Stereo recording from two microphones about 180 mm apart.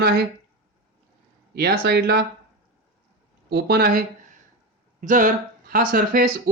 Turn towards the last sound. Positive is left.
turn(degrees=-50)  # may be behind; listen again after turning